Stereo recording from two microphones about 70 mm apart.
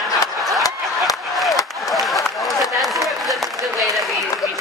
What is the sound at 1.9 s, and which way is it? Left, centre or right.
Applause, centre.